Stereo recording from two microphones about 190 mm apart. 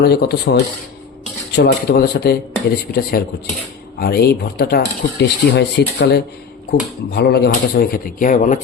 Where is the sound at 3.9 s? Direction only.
55° left (ahead or behind).